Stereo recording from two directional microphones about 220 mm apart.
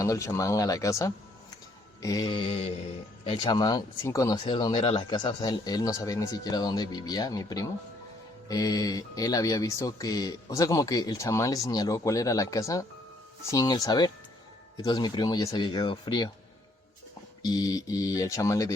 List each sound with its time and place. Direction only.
0.0 s speech: 15° left (ahead or behind)
17.4 s speech: 15° left (ahead or behind)